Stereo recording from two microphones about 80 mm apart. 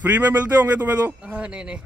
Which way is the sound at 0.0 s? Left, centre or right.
Centre.